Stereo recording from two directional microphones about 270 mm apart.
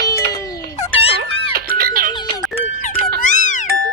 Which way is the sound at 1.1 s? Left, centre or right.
Right.